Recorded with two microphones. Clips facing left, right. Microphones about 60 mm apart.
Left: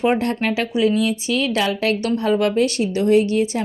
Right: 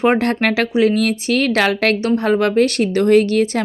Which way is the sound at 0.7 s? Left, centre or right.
Right.